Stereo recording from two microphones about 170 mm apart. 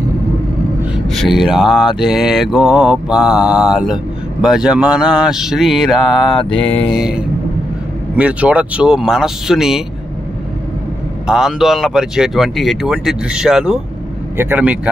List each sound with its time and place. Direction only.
1.0 s mantra: centre (ahead or behind)
11.2 s mantra: 5° right (ahead or behind)
14.3 s speech: 10° right (ahead or behind)